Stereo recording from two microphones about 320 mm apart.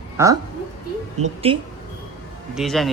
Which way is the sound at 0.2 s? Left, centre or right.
Centre.